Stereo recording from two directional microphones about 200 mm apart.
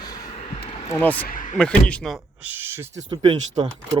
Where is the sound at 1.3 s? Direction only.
40° left (ahead or behind).